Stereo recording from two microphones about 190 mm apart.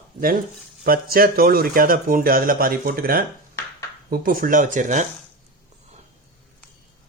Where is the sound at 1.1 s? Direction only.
50° right (ahead or behind).